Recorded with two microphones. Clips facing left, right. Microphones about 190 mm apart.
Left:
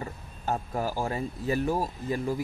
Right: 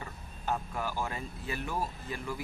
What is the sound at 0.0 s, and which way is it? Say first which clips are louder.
A man's voice: left 5 dB; 40° left (ahead or behind).